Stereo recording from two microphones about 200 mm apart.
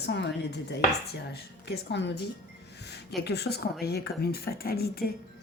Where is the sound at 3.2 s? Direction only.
55° left (ahead or behind).